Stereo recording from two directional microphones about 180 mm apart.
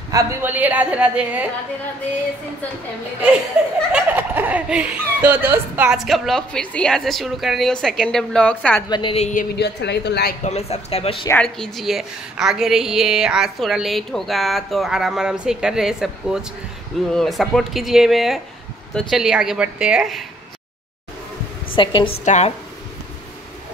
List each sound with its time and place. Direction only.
0.1 s a woman's voice: 15° right (ahead or behind)
3.6 s a woman's voice: 5° right (ahead or behind)
8.8 s speech: 25° left (ahead or behind); by 9.6 s 45° left (ahead or behind)
9.6 s a woman's voice: 70° left (ahead or behind)
10.4 s speech: 35° left (ahead or behind)
11.2 s a woman's voice: 5° left (ahead or behind)
21.7 s a woman's voice: 25° left (ahead or behind)
22.2 s speech: 40° left (ahead or behind)